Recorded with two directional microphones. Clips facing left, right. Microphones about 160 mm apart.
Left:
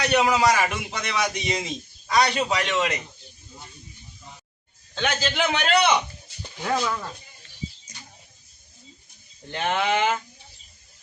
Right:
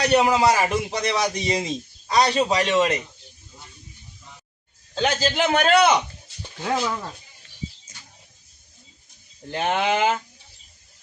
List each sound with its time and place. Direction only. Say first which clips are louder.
0.0 s speech: right 2 dB; 30° right (ahead or behind)
4.9 s speech: right 3 dB; 35° right (ahead or behind)
6.7 s speech: right 1 dB; 15° right (ahead or behind)
9.5 s speech: right 2 dB; 35° right (ahead or behind)